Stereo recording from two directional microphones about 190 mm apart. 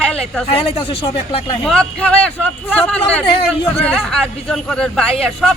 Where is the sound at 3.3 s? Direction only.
30° left (ahead or behind).